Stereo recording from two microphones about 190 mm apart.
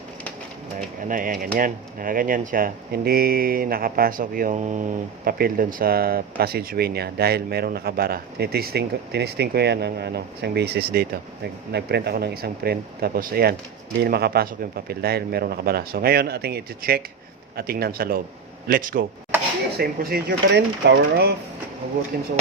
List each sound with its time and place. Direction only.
0.8 s speech: 45° right (ahead or behind); by 21.3 s 65° right (ahead or behind)
22.1 s speech: 55° right (ahead or behind)